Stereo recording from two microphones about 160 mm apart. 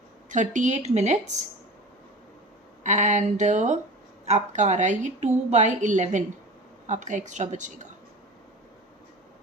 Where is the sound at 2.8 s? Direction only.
50° right (ahead or behind).